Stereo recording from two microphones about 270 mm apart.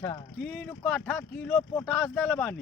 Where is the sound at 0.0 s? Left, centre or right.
Centre.